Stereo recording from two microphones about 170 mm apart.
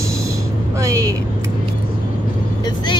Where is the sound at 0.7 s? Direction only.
20° right (ahead or behind).